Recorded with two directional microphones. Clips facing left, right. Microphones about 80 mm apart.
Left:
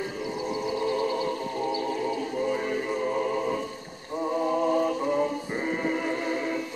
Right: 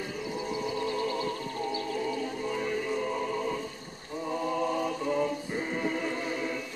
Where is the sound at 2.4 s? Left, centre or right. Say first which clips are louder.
Left 4 dB; left.